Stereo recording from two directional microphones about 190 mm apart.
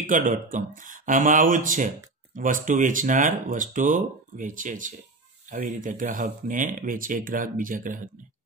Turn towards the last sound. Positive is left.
turn(degrees=-45)  # may be behind; listen again after turning